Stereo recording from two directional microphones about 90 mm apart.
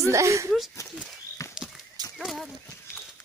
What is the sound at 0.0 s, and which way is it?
Speech, 35° right (ahead or behind).